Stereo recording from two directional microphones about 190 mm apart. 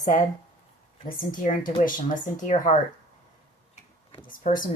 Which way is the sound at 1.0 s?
45° left (ahead or behind).